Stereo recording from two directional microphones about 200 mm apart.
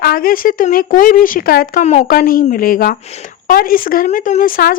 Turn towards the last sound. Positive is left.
turn(degrees=45)  # may be behind; listen again after turning